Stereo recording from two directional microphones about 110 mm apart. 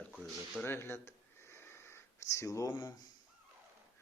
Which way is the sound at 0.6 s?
25° left (ahead or behind).